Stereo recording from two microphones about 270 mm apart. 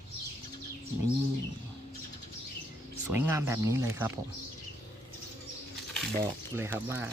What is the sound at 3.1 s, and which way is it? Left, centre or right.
Speech, centre.